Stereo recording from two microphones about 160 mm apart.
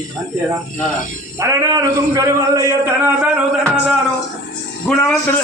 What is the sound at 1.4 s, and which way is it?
A man's voice, 20° right (ahead or behind).